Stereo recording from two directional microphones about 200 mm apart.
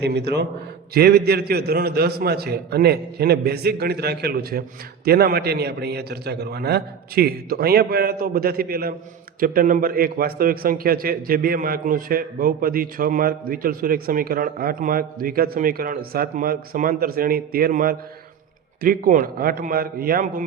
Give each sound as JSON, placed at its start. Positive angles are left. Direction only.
{"t": 0.0, "sound": "a man's voice", "side_deg": -55}